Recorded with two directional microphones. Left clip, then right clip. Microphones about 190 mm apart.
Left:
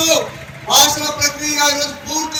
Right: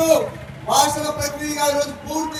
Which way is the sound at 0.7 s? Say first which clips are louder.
Left 4 dB; 70° right (ahead or behind).